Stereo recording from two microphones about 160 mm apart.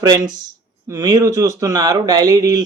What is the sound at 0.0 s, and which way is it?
Speech, 25° right (ahead or behind).